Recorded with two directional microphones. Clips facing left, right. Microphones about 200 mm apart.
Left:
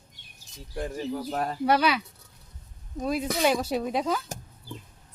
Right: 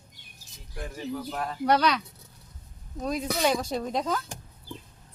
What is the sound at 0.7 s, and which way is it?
Speech, 35° left (ahead or behind).